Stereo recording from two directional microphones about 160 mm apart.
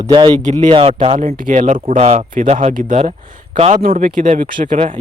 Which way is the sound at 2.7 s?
55° right (ahead or behind).